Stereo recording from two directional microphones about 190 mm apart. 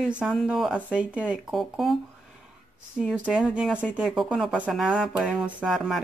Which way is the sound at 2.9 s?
5° right (ahead or behind).